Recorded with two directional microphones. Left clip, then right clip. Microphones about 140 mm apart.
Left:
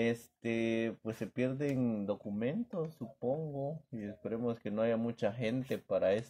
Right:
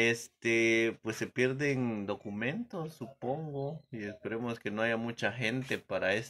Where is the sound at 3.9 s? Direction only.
35° left (ahead or behind).